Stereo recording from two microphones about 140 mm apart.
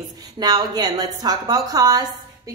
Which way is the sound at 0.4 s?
30° right (ahead or behind).